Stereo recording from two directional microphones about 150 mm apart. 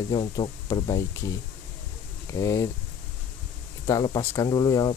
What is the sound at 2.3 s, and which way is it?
Speech, 20° left (ahead or behind).